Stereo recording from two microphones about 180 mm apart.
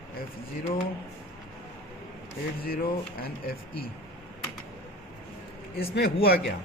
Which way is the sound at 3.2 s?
55° left (ahead or behind).